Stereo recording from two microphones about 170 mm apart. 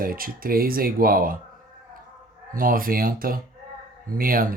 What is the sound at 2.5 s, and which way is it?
Speech, 55° right (ahead or behind).